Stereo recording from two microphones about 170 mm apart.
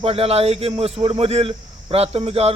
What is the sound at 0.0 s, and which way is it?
A man's voice, 35° right (ahead or behind).